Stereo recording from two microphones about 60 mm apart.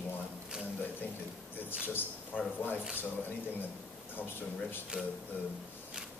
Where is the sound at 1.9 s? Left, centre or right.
Left.